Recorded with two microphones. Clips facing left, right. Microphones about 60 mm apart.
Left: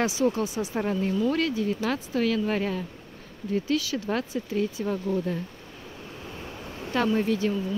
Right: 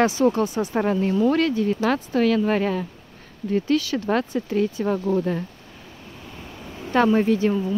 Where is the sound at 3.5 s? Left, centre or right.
Right.